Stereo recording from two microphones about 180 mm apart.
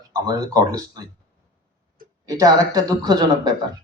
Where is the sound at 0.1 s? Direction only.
20° right (ahead or behind).